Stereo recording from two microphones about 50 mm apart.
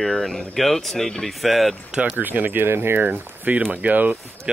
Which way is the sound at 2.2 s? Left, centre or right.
Right.